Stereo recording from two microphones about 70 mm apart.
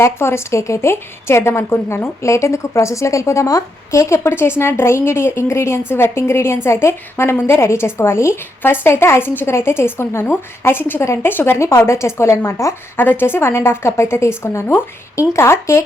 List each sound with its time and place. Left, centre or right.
0.0 s a woman's voice: left
11.0 s a woman's voice: left
11.3 s a woman's voice: left
13.0 s a woman's voice: left